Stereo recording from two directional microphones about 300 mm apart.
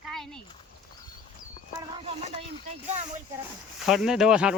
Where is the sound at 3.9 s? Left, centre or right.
Centre.